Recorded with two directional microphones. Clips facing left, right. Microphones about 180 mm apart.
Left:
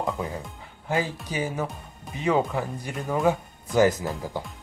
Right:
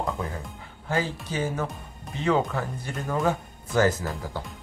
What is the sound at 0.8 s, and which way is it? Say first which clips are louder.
Speech: left 1 dB; 15° left (ahead or behind).